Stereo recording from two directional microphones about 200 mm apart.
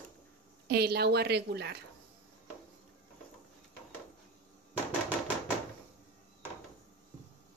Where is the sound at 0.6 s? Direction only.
55° right (ahead or behind).